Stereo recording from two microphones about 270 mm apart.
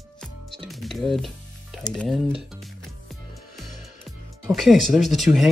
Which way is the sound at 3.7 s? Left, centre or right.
Centre.